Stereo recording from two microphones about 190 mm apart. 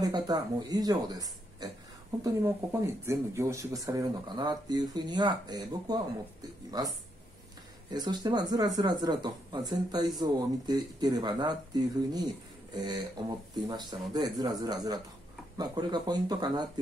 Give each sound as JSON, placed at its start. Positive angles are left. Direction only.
{"t": 0.0, "sound": "speech", "side_deg": -20}